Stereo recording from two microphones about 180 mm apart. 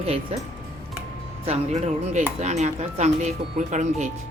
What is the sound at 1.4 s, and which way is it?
Speech, 35° right (ahead or behind).